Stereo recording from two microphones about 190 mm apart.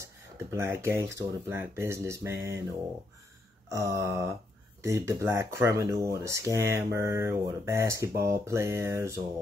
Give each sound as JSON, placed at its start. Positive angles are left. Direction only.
{"t": 0.0, "sound": "speech", "side_deg": -15}
{"t": 3.6, "sound": "speech", "side_deg": -15}